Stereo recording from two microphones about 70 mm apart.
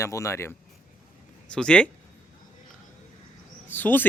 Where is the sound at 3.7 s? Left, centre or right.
Left.